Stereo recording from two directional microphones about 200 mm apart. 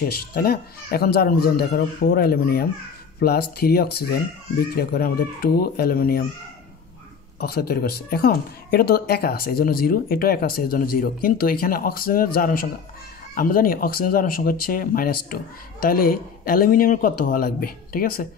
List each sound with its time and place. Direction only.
0.0 s speech: 50° left (ahead or behind)
7.3 s speech: 50° left (ahead or behind)